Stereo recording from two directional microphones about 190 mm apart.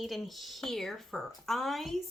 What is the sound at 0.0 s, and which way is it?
A woman's voice, centre (ahead or behind).